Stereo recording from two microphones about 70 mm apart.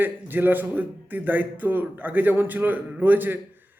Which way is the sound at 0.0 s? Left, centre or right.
Right.